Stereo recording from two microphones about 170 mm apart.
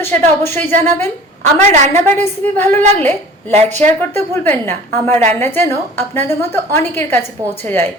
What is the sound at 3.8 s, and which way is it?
A woman's voice, 10° left (ahead or behind).